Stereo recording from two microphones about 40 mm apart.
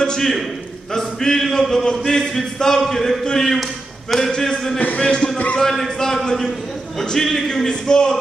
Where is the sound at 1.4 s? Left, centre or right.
Centre.